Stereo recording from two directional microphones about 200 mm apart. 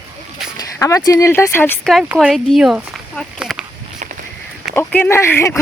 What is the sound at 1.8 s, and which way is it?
Speech, centre (ahead or behind).